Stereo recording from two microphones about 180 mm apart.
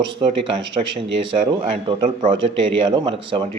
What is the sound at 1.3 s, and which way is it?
A man's voice, 30° right (ahead or behind).